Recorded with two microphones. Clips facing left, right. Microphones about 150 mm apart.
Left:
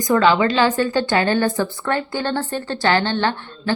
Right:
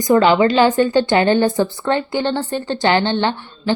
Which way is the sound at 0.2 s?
30° right (ahead or behind).